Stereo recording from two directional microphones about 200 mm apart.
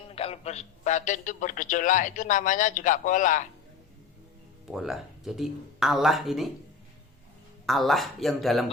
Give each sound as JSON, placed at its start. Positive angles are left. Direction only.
{"t": 0.1, "sound": "a man's voice", "side_deg": 30}
{"t": 4.7, "sound": "speech", "side_deg": 0}
{"t": 7.7, "sound": "speech", "side_deg": 0}